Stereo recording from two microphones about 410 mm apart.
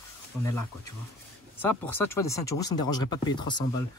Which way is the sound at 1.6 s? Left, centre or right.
Centre.